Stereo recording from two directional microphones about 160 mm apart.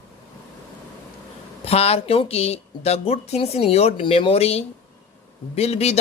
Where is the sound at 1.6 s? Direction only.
40° left (ahead or behind).